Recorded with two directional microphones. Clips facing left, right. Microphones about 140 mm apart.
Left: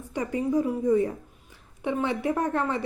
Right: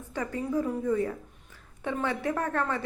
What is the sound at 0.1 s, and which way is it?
A woman's voice, 15° left (ahead or behind).